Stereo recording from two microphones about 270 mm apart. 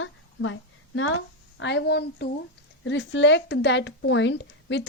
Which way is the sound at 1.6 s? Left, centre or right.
Left.